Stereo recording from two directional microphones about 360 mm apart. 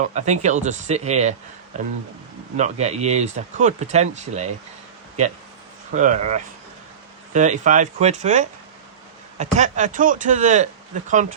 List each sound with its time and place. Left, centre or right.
0.1 s speech: centre
2.6 s speech: centre
5.9 s speech: right